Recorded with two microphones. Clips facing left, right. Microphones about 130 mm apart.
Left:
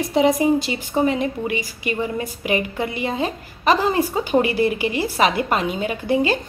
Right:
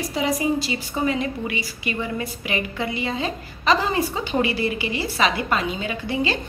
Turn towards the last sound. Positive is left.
turn(degrees=50)  # may be behind; listen again after turning